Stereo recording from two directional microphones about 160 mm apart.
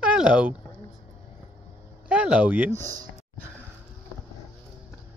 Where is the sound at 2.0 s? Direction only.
5° right (ahead or behind).